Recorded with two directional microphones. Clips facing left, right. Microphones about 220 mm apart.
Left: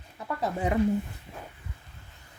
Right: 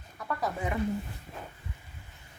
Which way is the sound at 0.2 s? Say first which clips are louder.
Left 3 dB; 25° left (ahead or behind).